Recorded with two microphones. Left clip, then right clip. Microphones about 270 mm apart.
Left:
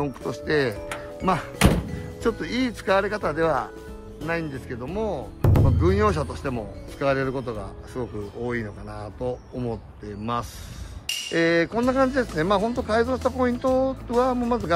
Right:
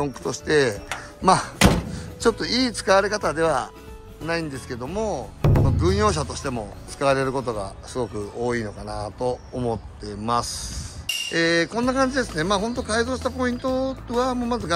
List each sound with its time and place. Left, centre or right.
0.0 s speech: centre